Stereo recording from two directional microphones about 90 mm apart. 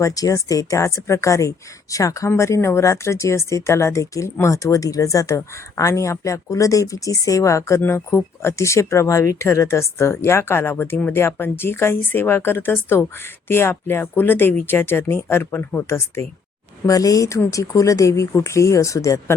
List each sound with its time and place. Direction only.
0.0 s speech: 40° left (ahead or behind)
16.8 s speech: 40° left (ahead or behind)